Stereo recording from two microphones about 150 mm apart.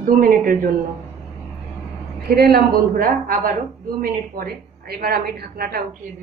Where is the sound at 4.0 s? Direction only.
80° right.